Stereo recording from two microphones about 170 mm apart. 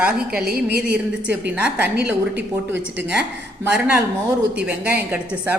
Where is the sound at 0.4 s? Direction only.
65° right (ahead or behind).